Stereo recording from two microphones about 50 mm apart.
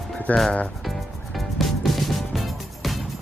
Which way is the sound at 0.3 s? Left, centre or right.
Left.